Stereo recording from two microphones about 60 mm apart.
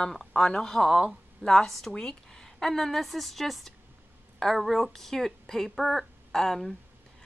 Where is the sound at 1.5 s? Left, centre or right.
Centre.